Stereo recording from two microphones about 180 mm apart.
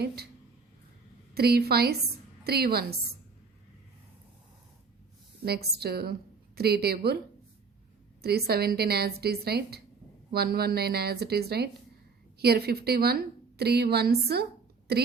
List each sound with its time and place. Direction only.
1.3 s a woman's voice: 60° right (ahead or behind)
5.5 s a woman's voice: 60° right (ahead or behind)
8.2 s a woman's voice: 60° right (ahead or behind)